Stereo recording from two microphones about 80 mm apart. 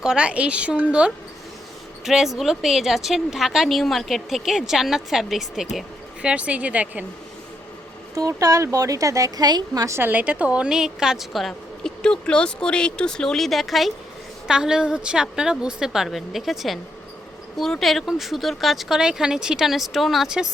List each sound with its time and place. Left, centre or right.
0.0 s a woman's voice: centre
6.2 s a woman's voice: centre
8.1 s speech: right
10.0 s a woman's voice: right